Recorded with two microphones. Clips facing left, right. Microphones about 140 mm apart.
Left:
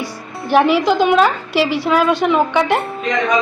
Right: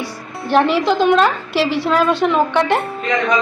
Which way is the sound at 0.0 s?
Centre (ahead or behind).